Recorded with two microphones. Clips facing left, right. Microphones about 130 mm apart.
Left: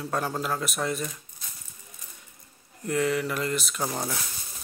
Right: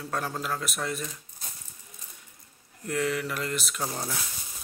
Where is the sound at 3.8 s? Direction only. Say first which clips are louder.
Left 3 dB; 20° left (ahead or behind).